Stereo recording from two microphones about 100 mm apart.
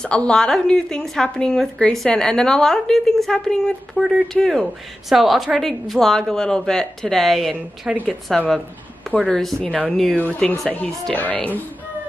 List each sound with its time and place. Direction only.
0.0 s a woman's voice: 10° left (ahead or behind)